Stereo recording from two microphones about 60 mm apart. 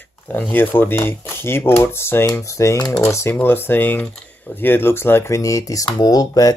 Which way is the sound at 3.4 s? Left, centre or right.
Left.